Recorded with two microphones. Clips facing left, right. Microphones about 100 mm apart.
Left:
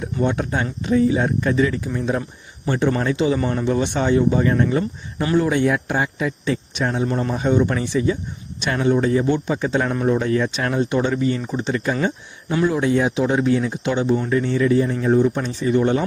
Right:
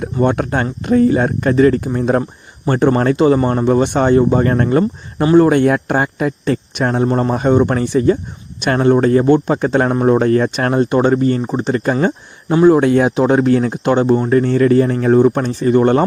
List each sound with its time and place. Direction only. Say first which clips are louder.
0.0 s a man's voice: right 6 dB; 55° right (ahead or behind)
12.6 s speech: right 9 dB; 55° right (ahead or behind)